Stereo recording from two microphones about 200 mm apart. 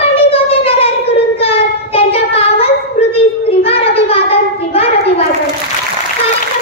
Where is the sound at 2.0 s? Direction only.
30° left (ahead or behind).